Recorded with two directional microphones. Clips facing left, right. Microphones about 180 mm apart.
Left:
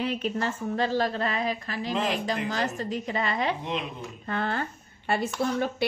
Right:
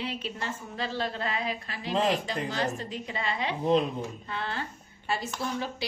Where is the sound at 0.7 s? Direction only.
45° left (ahead or behind).